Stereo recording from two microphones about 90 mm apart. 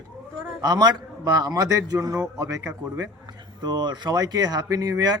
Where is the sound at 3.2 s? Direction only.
55° right (ahead or behind).